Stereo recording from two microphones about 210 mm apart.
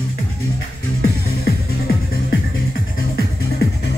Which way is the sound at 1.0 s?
45° left (ahead or behind).